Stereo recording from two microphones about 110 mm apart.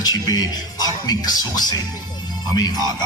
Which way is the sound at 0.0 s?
35° left (ahead or behind).